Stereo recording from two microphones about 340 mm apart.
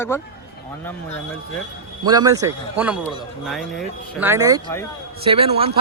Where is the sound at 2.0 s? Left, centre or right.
Centre.